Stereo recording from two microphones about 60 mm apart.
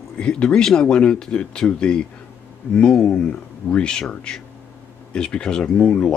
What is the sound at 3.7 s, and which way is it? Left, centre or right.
Speech, centre.